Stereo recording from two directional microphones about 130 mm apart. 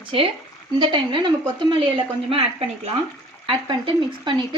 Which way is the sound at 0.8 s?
40° right (ahead or behind).